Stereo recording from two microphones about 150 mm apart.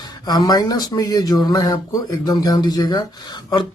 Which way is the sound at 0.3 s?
25° left (ahead or behind).